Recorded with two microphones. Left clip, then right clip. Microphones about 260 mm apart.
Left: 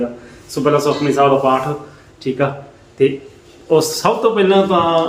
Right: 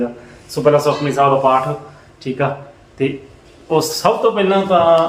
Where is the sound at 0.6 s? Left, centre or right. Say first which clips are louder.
Right 1 dB; centre.